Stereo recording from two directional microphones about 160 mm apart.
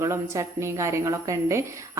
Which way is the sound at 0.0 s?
20° right (ahead or behind).